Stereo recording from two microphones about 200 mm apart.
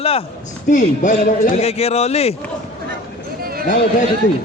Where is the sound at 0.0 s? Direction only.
30° left (ahead or behind).